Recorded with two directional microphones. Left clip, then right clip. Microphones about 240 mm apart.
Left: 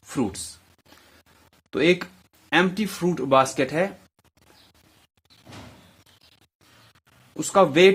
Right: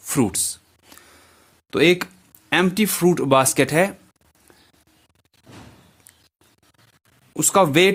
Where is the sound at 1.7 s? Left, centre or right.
Right.